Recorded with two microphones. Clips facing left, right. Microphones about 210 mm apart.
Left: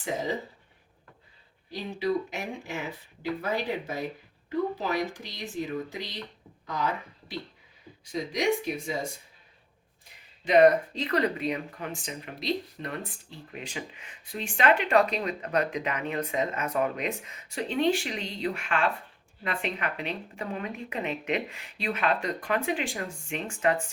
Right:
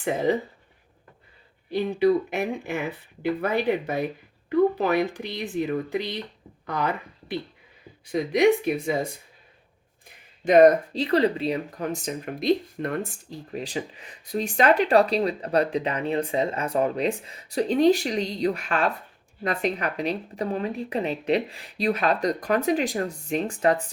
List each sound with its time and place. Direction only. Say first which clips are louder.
0.0 s speech: right 7 dB; 60° right (ahead or behind)
1.7 s speech: right 8 dB; 60° right (ahead or behind)
10.4 s speech: right 4 dB; 45° right (ahead or behind)
10.9 s speech: right 6 dB; 30° right (ahead or behind)